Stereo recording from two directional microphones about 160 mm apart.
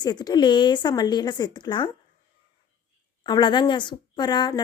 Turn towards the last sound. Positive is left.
turn(degrees=25)  # may be behind; listen again after turning